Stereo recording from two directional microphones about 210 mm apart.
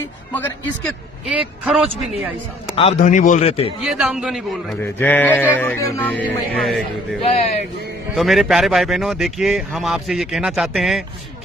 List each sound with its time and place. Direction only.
0.3 s speech: 5° left (ahead or behind)
2.7 s a man's voice: 30° left (ahead or behind)
3.8 s speech: centre (ahead or behind)
4.8 s sheep: 10° left (ahead or behind)
6.2 s speech: centre (ahead or behind)
7.2 s speech: 30° left (ahead or behind)
8.1 s speech: centre (ahead or behind)